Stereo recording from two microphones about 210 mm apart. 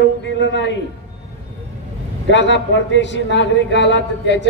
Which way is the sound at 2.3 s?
55° left (ahead or behind).